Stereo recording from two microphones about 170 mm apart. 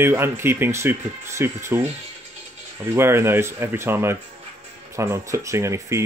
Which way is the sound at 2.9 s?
15° right (ahead or behind).